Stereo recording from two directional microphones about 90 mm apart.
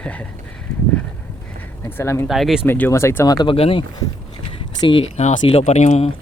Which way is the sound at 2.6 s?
25° left (ahead or behind).